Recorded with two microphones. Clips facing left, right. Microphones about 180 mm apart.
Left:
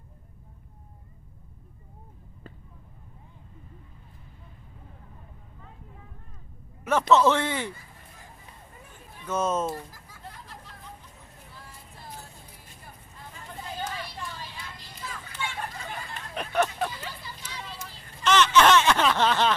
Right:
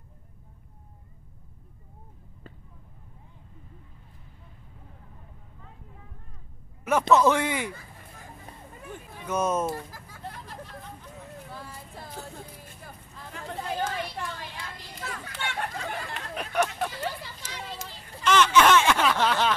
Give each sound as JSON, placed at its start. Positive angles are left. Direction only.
{"t": 6.9, "sound": "speech", "side_deg": -10}
{"t": 8.5, "sound": "hubbub", "side_deg": -45}
{"t": 9.3, "sound": "speech", "side_deg": -10}
{"t": 13.3, "sound": "chatter", "side_deg": -75}
{"t": 13.7, "sound": "a sound", "side_deg": -60}
{"t": 16.3, "sound": "hubbub", "side_deg": -10}
{"t": 18.2, "sound": "a sound", "side_deg": -10}